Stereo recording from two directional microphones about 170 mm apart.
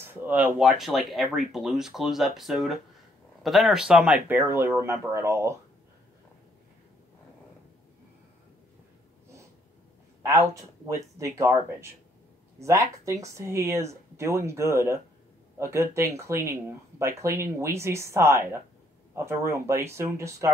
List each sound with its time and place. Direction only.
0.0 s speech: 10° right (ahead or behind)
11.1 s speech: 15° right (ahead or behind)